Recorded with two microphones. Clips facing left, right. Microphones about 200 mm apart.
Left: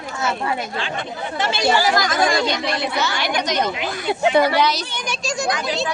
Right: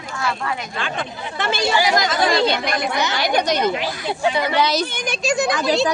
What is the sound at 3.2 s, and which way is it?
A woman's voice, 40° right (ahead or behind).